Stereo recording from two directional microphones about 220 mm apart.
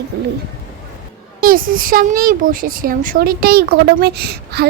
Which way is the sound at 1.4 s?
40° right (ahead or behind).